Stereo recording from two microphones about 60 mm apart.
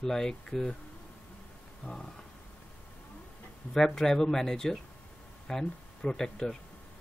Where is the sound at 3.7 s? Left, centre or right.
Centre.